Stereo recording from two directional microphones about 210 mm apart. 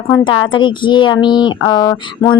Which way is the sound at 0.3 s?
20° left (ahead or behind).